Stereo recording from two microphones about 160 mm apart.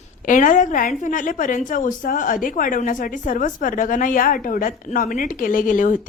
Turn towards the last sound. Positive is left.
turn(degrees=55)  # may be behind; listen again after turning